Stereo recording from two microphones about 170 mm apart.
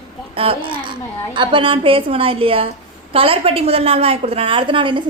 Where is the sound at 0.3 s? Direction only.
30° right (ahead or behind).